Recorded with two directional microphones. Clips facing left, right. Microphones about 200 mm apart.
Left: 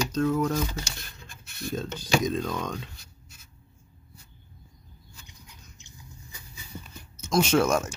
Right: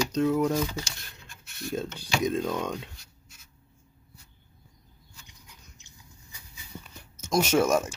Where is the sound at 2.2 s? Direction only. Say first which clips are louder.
Right 1 dB; 10° right (ahead or behind).